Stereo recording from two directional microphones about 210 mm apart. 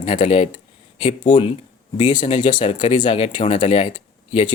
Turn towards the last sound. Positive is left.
turn(degrees=25)  # may be behind; listen again after turning